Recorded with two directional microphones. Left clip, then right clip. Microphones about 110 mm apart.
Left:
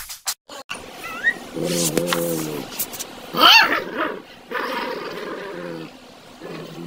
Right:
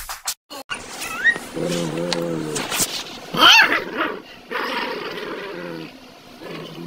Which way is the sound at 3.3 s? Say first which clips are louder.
Right 1 dB; 20° left (ahead or behind).